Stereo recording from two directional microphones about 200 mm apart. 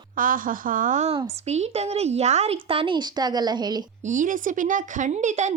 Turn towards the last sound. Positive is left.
turn(degrees=-35)  # may be behind; listen again after turning